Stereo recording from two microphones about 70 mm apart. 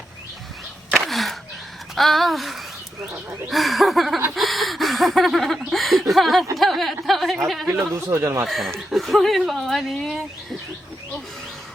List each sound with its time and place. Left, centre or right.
0.9 s a sound: centre
2.0 s speech: centre
4.4 s a sound: centre
5.7 s speech: centre
7.9 s speech: right
8.4 s speech: centre